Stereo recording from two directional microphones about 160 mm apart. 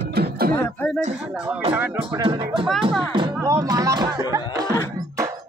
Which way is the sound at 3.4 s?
20° right (ahead or behind).